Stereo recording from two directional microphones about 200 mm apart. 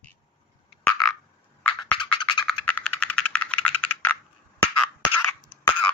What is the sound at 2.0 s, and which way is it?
Music, 20° left (ahead or behind).